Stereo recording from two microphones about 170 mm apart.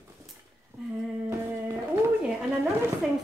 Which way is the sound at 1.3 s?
15° right (ahead or behind).